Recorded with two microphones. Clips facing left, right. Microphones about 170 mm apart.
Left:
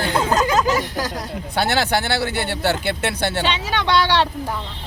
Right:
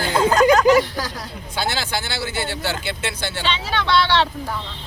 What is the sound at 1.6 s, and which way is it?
Speech, 65° left (ahead or behind).